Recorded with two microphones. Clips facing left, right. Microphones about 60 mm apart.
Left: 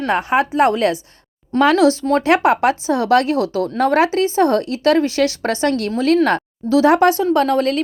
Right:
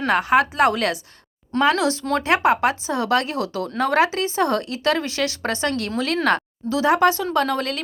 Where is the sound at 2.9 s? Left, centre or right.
Left.